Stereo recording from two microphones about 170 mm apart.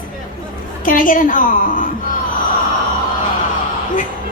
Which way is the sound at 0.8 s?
55° left (ahead or behind).